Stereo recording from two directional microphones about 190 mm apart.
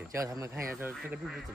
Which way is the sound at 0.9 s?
5° right (ahead or behind).